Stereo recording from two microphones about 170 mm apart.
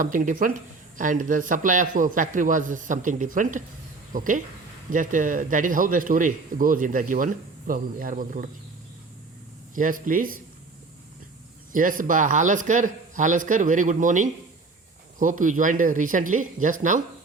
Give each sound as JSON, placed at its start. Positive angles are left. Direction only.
{"t": 0.0, "sound": "speech", "side_deg": -50}
{"t": 9.7, "sound": "speech", "side_deg": -55}
{"t": 11.7, "sound": "speech", "side_deg": -50}